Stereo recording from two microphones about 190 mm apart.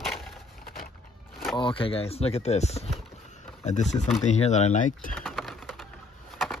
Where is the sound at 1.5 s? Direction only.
25° left (ahead or behind); by 5.1 s 45° left (ahead or behind).